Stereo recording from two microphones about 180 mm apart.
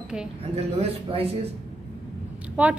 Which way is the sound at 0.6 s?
35° right (ahead or behind).